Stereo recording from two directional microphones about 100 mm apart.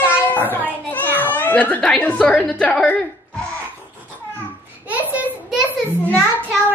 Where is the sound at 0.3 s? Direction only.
20° left (ahead or behind).